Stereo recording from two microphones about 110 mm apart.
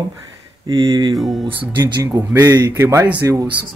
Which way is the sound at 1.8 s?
30° right (ahead or behind).